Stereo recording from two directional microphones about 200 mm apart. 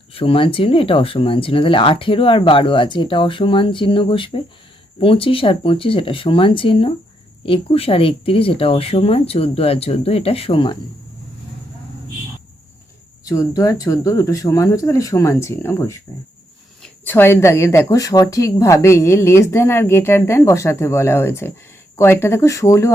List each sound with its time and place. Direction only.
0.1 s speech: 30° left (ahead or behind)
13.2 s speech: 15° left (ahead or behind)